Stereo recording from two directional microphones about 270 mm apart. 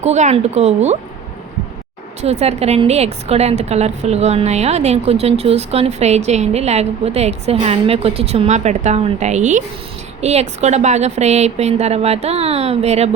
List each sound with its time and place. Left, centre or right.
0.0 s a woman's voice: right
2.2 s a woman's voice: right